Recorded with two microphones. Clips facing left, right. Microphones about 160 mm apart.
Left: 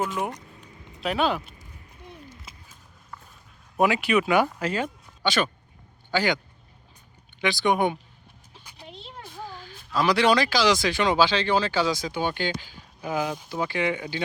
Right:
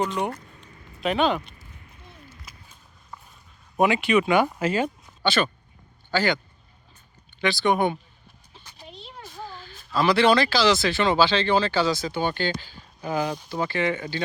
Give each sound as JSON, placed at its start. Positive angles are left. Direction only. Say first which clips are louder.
{"t": 0.0, "sound": "speech", "louder": "right 2 dB", "side_deg": 5}
{"t": 0.3, "sound": "a sound", "louder": "right 3 dB", "side_deg": 15}
{"t": 1.0, "sound": "speech", "louder": "right 2 dB", "side_deg": 5}
{"t": 3.1, "sound": "a sound", "louder": "right 1 dB", "side_deg": -15}
{"t": 3.8, "sound": "speech", "louder": "right 1 dB", "side_deg": 5}
{"t": 4.4, "sound": "speech", "louder": "right 3 dB", "side_deg": -5}
{"t": 5.2, "sound": "speech", "louder": "right 1 dB", "side_deg": 10}
{"t": 7.4, "sound": "speech", "louder": "right 1 dB", "side_deg": 15}
{"t": 8.5, "sound": "a sound", "louder": "even", "side_deg": 10}
{"t": 9.3, "sound": "speech", "louder": "even", "side_deg": 10}